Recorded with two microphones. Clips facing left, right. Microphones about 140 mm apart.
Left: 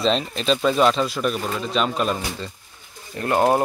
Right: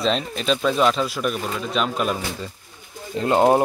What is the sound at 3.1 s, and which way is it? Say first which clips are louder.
Speech: right 2 dB; 20° right (ahead or behind).